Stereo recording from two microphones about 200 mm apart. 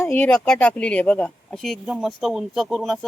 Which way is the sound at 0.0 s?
10° left (ahead or behind).